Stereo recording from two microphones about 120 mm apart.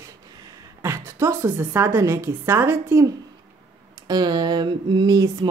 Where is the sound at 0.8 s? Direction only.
25° right (ahead or behind).